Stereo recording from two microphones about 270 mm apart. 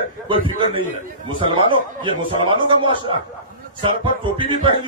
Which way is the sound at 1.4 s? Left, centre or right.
Centre.